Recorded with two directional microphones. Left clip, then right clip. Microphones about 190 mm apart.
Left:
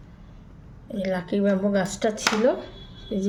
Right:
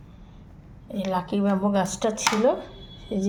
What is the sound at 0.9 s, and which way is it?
Speech, 5° right (ahead or behind).